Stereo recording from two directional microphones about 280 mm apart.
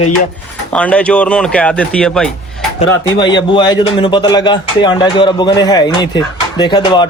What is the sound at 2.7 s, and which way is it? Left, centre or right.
A man's voice, centre.